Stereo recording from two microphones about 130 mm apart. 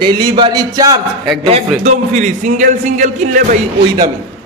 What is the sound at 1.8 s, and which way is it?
A man's voice, 65° right (ahead or behind).